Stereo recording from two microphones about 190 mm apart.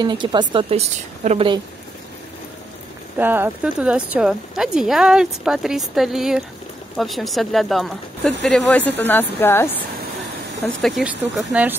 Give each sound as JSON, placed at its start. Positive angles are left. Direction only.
{"t": 0.0, "sound": "a woman's voice", "side_deg": -25}
{"t": 3.2, "sound": "speech", "side_deg": -10}
{"t": 10.8, "sound": "speech", "side_deg": 0}